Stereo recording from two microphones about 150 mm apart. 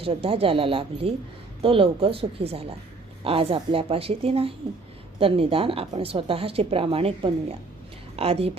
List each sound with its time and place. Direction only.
0.0 s a woman's voice: 40° right (ahead or behind)